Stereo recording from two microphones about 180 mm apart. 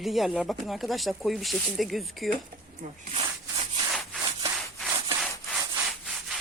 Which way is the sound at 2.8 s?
45° right (ahead or behind).